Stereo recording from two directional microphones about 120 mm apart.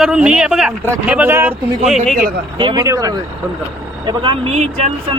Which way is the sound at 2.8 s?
30° right (ahead or behind).